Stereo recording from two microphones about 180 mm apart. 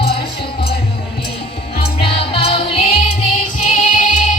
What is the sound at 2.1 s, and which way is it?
Music, 30° left (ahead or behind).